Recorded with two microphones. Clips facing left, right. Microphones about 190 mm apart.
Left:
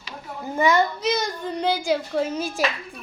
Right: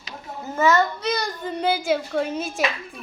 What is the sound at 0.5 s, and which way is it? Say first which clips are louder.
A child's voice: even; 15° left (ahead or behind).